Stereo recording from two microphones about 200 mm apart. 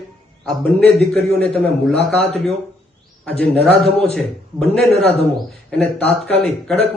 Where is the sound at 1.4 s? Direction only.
5° left (ahead or behind).